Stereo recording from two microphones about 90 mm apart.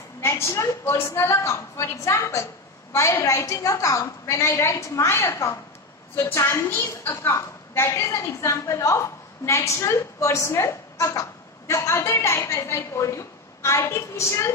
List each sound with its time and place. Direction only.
0.2 s a woman's voice: 30° left (ahead or behind)